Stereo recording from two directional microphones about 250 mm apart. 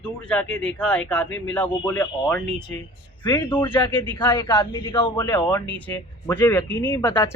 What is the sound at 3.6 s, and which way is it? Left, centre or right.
Speech, centre.